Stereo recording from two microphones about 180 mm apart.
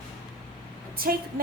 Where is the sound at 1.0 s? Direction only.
55° right (ahead or behind).